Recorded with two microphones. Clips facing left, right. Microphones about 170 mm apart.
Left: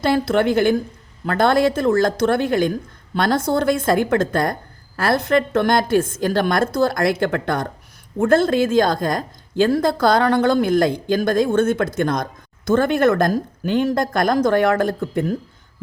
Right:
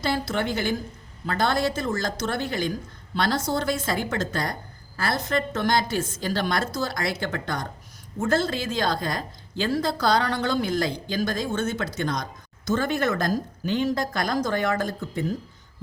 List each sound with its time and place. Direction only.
0.0 s a woman's voice: 55° left (ahead or behind)